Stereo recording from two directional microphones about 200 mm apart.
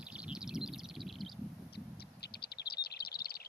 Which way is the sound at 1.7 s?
55° left (ahead or behind).